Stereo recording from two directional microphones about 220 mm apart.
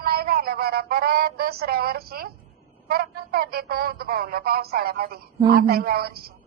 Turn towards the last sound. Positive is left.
turn(degrees=-45)  # may be behind; listen again after turning